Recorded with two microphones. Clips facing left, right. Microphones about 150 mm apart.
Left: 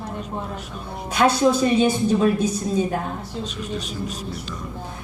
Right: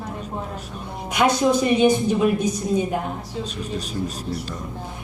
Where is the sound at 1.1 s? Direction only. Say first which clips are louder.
Left 1 dB; 15° right (ahead or behind).